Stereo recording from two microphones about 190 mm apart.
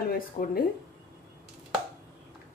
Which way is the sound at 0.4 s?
40° left (ahead or behind).